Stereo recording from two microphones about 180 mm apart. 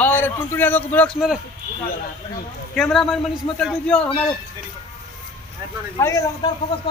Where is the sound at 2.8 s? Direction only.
5° left (ahead or behind).